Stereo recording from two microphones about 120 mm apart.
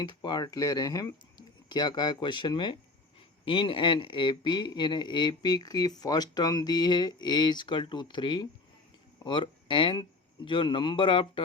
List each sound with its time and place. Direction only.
0.0 s speech: 40° left (ahead or behind)